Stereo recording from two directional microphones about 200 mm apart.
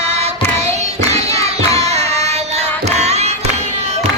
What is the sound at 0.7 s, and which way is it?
Singing, 35° right (ahead or behind).